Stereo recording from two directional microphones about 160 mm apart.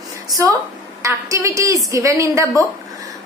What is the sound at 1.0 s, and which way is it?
A woman's voice, 20° right (ahead or behind).